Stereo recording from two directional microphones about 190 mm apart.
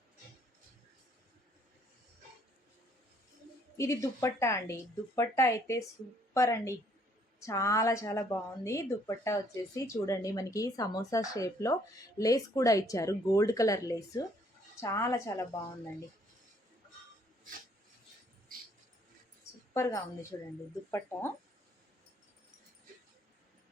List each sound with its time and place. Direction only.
3.8 s a woman's voice: 15° left (ahead or behind)
19.7 s a woman's voice: 15° left (ahead or behind)